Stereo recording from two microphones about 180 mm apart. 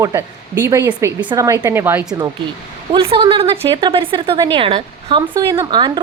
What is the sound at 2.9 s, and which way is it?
A woman's voice, 30° right (ahead or behind).